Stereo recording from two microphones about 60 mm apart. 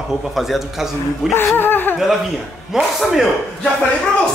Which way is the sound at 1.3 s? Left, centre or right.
Left.